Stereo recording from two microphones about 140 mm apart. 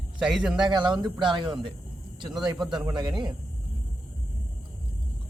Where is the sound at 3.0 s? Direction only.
35° right (ahead or behind).